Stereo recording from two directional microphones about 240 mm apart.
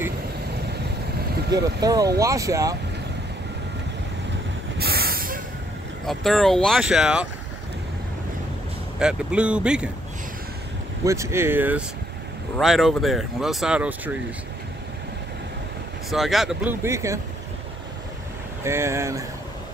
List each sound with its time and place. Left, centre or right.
1.6 s speech: centre
4.7 s vehicle: right
6.0 s speech: centre
9.0 s speech: centre
11.1 s speech: centre
16.1 s speech: centre
18.6 s speech: centre